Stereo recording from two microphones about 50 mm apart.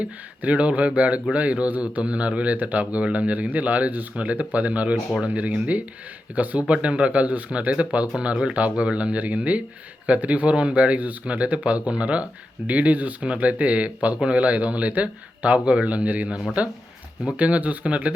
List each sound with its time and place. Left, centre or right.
0.0 s a man's voice: right
17.3 s a man's voice: right